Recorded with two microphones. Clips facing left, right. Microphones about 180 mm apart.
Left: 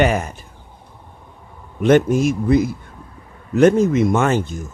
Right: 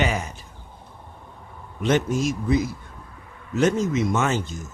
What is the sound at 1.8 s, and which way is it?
Speech, 55° left (ahead or behind).